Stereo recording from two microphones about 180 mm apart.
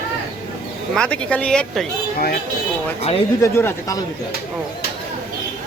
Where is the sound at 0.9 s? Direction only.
5° left (ahead or behind).